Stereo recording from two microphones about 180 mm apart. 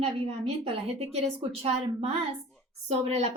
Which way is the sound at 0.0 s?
35° right (ahead or behind).